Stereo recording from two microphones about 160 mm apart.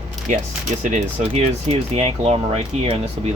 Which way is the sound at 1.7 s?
40° right (ahead or behind).